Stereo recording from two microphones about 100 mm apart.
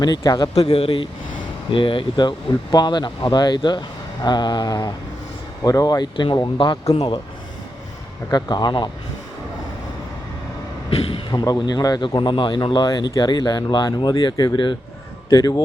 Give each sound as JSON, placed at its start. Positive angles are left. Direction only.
{"t": 0.0, "sound": "speech", "side_deg": 40}
{"t": 0.6, "sound": "a man's voice", "side_deg": 70}
{"t": 8.3, "sound": "speech", "side_deg": 45}
{"t": 10.8, "sound": "speech", "side_deg": 50}
{"t": 12.0, "sound": "speech", "side_deg": 55}
{"t": 15.3, "sound": "speech", "side_deg": 40}